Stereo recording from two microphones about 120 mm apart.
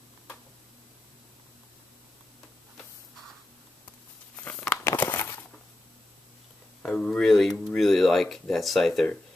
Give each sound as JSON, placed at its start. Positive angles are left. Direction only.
{"t": 4.5, "sound": "crumpling", "side_deg": 15}
{"t": 6.8, "sound": "speech", "side_deg": 10}